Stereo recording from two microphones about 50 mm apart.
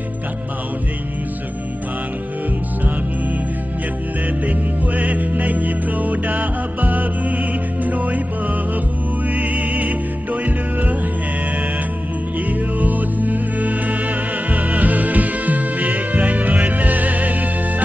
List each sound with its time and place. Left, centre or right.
4.5 s music: right
9.3 s music: right
12.8 s music: right